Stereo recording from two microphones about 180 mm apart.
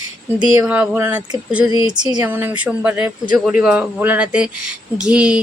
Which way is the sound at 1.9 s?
25° right (ahead or behind).